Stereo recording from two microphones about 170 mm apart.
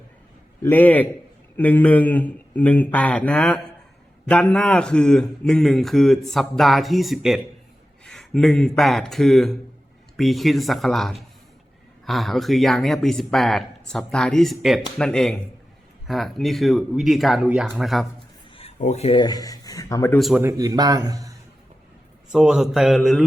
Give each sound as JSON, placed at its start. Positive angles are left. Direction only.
{"t": 0.6, "sound": "a man's voice", "side_deg": 10}
{"t": 18.8, "sound": "speech", "side_deg": 40}
{"t": 19.2, "sound": "speech", "side_deg": 20}
{"t": 20.1, "sound": "a man's voice", "side_deg": 0}
{"t": 20.4, "sound": "a man's voice", "side_deg": -20}
{"t": 22.3, "sound": "a man's voice", "side_deg": -5}